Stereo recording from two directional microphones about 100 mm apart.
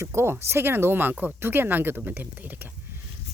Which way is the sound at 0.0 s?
25° right (ahead or behind).